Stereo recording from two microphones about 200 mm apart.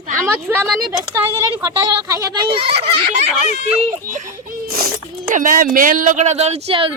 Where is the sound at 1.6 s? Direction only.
20° right (ahead or behind).